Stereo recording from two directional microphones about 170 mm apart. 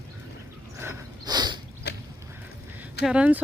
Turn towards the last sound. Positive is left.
turn(degrees=-5)  # may be behind; listen again after turning